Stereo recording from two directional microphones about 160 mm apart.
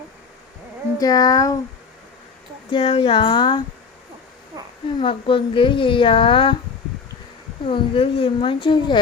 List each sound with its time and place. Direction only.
0.9 s speech: 25° left (ahead or behind)
2.7 s speech: 35° left (ahead or behind)
4.5 s a sound: 20° right (ahead or behind)
4.9 s speech: 30° left (ahead or behind)
7.7 s speech: 35° left (ahead or behind)